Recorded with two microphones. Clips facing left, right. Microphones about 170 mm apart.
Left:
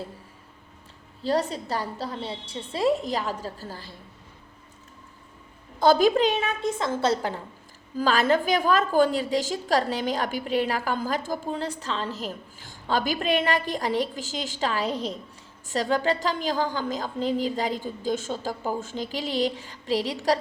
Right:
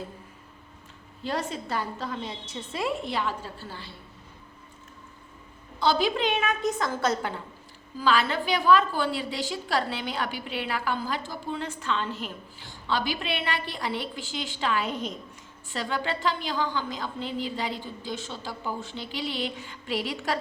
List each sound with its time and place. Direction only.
1.2 s a woman's voice: 35° left (ahead or behind)
5.8 s a woman's voice: 45° left (ahead or behind)